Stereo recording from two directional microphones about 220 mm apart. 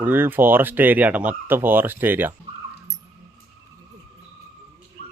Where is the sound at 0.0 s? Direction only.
10° right (ahead or behind).